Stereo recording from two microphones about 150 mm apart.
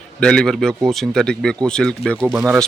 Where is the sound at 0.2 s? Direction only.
5° left (ahead or behind).